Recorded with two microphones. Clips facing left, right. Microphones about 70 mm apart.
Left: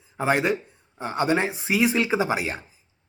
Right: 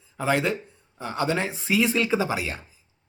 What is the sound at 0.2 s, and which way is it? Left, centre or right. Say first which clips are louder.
Speech: left 2 dB; left.